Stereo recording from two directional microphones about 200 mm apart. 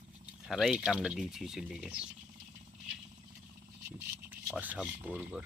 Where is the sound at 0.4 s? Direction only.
Centre (ahead or behind).